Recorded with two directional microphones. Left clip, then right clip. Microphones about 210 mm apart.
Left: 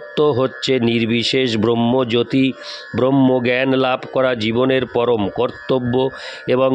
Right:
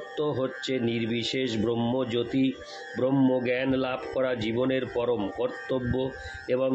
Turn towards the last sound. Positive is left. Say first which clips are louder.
# left 10 dB
turn(degrees=50)  # may be behind; listen again after turning